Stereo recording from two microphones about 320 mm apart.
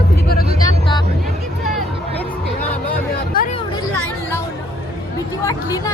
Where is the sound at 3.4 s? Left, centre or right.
Left.